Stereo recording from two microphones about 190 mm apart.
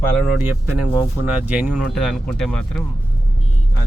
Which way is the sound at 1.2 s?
10° right (ahead or behind).